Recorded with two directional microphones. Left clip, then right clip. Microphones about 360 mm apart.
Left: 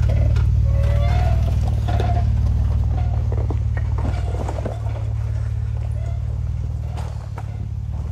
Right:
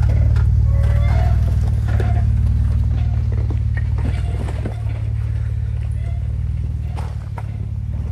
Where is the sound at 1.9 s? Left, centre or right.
Left.